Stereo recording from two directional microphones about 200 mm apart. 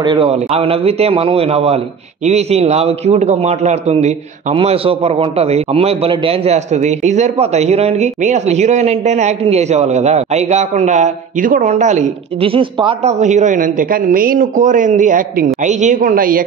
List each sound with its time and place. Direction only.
0.0 s a man's voice: 25° right (ahead or behind)
13.2 s a man's voice: 35° right (ahead or behind)